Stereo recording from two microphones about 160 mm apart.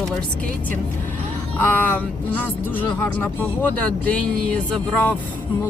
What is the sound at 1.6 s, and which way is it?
Speech, 10° left (ahead or behind).